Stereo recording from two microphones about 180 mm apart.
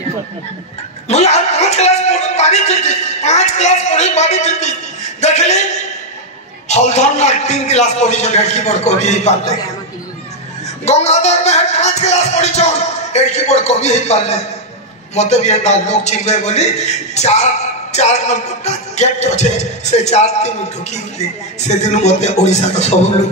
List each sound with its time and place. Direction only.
1.0 s speech: 35° left (ahead or behind)
6.7 s a man's voice: 40° left (ahead or behind)
10.9 s a man's voice: 40° left (ahead or behind)